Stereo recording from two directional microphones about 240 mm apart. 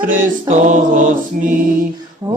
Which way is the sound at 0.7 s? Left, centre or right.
Right.